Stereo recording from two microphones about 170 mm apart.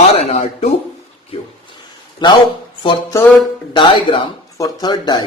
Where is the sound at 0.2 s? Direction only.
40° left (ahead or behind).